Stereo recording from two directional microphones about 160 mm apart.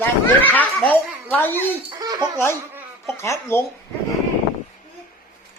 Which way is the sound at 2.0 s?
25° right (ahead or behind).